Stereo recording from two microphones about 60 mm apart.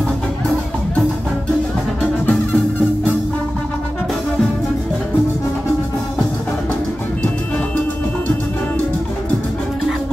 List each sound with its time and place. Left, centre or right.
2.0 s music: left